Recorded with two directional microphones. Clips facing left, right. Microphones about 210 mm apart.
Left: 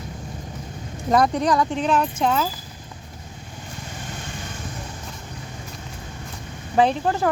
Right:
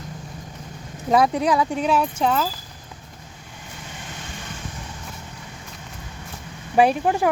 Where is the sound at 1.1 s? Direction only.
5° right (ahead or behind).